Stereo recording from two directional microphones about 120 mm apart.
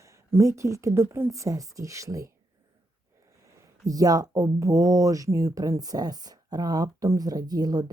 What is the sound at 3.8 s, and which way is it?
Speech, 30° right (ahead or behind).